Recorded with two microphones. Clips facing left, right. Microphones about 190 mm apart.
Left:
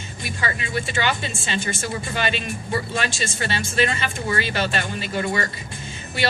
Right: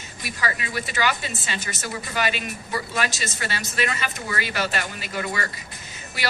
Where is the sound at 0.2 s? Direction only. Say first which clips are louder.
Left 1 dB; 25° left (ahead or behind).